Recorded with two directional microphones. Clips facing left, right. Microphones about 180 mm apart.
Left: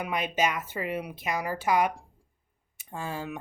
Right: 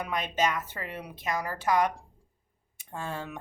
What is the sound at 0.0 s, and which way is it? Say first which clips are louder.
Speech: left 1 dB; 10° left (ahead or behind).